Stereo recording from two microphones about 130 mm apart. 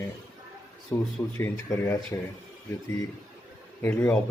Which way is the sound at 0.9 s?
15° left (ahead or behind).